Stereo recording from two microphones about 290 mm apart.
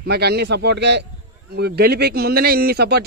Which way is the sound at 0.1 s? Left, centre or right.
Right.